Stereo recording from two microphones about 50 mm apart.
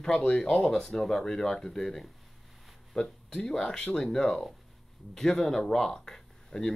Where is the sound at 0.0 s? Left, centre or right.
Centre.